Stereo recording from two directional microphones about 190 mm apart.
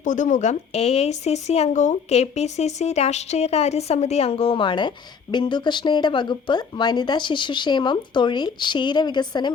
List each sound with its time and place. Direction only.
0.0 s speech: 40° left (ahead or behind); by 9.5 s 20° left (ahead or behind)